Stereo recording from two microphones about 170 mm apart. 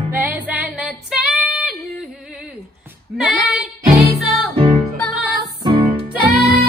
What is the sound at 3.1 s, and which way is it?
Music, centre (ahead or behind).